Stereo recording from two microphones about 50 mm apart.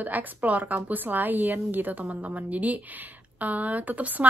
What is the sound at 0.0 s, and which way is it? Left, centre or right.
Speech, right.